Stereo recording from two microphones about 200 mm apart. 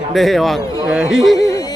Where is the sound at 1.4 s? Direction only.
15° left (ahead or behind).